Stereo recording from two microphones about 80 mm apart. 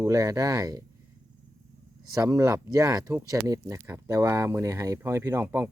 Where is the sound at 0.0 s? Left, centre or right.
Right.